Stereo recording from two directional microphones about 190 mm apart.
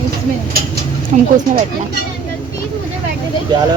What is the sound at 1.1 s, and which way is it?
Speech, 40° right (ahead or behind).